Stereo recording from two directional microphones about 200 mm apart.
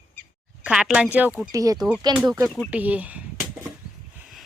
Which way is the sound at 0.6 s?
5° right (ahead or behind).